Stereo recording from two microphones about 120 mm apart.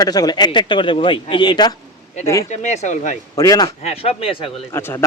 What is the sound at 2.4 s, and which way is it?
Speech, 75° left (ahead or behind).